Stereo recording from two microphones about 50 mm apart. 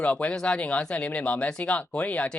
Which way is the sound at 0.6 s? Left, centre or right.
Left.